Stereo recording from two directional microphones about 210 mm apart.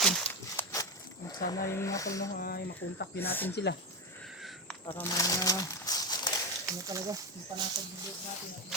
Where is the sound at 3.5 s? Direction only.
55° left (ahead or behind).